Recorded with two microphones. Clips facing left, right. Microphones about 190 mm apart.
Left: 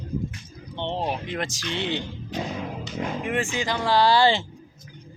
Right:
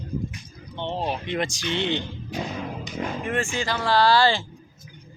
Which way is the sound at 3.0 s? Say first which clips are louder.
Even; 15° left (ahead or behind).